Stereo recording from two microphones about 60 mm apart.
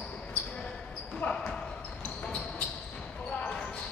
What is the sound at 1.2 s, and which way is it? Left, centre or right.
Basketball bounce, left.